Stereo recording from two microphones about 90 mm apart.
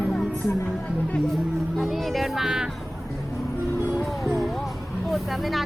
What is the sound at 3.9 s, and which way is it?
Music, centre (ahead or behind).